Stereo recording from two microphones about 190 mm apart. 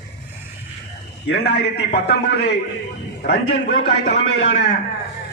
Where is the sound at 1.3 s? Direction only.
60° left (ahead or behind).